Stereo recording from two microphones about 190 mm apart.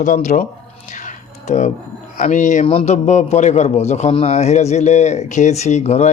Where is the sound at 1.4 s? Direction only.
40° left (ahead or behind).